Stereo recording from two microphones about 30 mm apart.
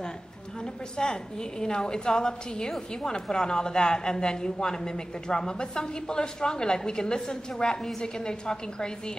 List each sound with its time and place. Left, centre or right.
0.9 s a woman's voice: left